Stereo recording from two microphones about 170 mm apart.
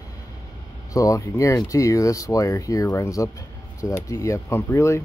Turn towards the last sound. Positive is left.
turn(degrees=15)  # may be behind; listen again after turning